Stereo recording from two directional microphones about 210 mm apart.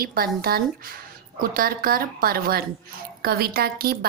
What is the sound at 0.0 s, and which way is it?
A woman's voice, 45° right (ahead or behind).